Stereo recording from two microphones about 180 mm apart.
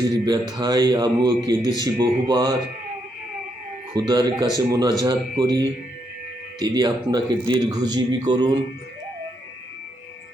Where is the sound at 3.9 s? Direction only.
20° right (ahead or behind).